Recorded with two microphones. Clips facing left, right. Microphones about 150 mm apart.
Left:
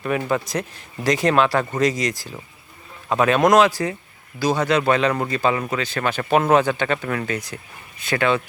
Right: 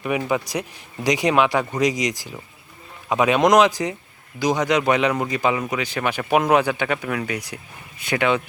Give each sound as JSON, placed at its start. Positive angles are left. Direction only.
{"t": 0.3, "sound": "speech", "side_deg": -10}